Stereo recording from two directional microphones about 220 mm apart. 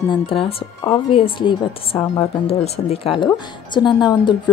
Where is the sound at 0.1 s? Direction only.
25° left (ahead or behind).